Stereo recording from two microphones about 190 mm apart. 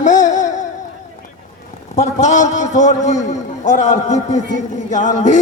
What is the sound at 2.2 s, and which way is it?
A man's voice, 40° left (ahead or behind).